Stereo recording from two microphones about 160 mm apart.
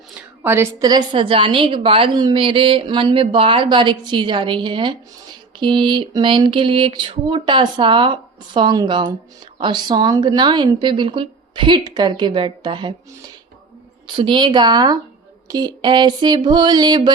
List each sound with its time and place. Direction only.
0.1 s a sound: 15° right (ahead or behind)
0.9 s a woman's voice: 30° right (ahead or behind)
14.2 s a woman's voice: 30° right (ahead or behind)